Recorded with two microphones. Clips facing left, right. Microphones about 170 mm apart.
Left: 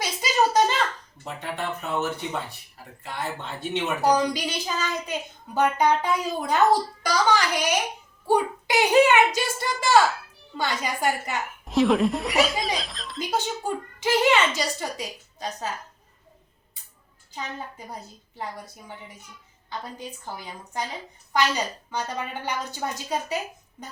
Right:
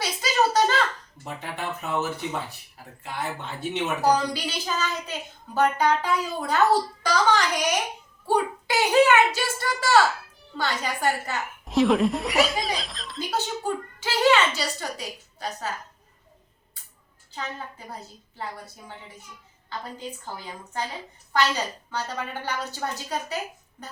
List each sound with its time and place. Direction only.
0.0 s a sound: 15° left (ahead or behind)
1.2 s speech: 5° right (ahead or behind)
4.0 s speech: 15° left (ahead or behind)
8.3 s speech: 15° left (ahead or behind)
11.6 s speech: centre (ahead or behind)
13.3 s speech: 15° left (ahead or behind)
18.3 s speech: 15° left (ahead or behind)